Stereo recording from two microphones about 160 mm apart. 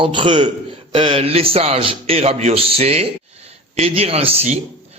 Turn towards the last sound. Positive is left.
turn(degrees=-40)  # may be behind; listen again after turning